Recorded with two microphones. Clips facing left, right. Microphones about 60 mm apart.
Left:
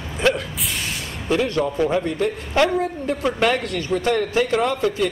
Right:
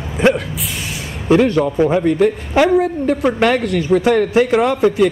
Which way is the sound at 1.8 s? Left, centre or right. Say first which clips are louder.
Right 9 dB; centre.